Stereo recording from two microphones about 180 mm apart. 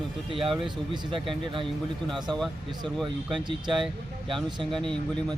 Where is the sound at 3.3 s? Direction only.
25° right (ahead or behind).